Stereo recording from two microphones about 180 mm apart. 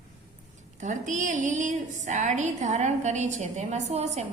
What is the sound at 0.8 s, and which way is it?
A woman's voice, 45° right (ahead or behind).